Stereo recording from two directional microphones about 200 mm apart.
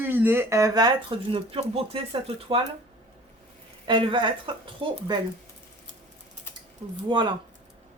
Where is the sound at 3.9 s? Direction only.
25° right (ahead or behind).